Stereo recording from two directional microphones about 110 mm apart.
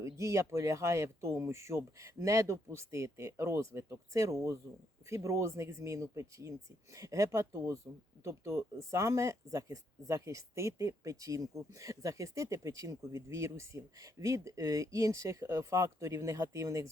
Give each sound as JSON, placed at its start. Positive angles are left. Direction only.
{"t": 0.0, "sound": "speech", "side_deg": -25}